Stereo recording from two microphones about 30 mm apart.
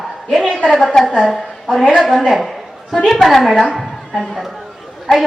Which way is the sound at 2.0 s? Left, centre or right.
Centre.